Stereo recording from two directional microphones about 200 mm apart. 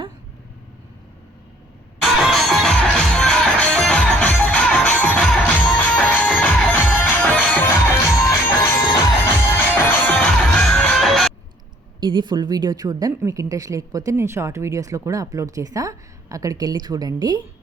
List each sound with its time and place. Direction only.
2.0 s music: centre (ahead or behind)
11.9 s a woman's voice: 20° right (ahead or behind)